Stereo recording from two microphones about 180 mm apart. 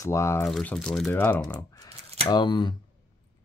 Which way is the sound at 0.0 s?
15° left (ahead or behind).